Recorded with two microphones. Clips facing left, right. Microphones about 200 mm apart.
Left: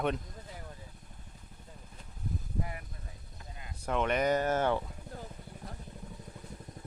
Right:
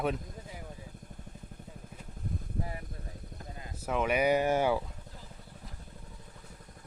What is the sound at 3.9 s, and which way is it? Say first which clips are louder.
Speech: right 1 dB; 5° right (ahead or behind).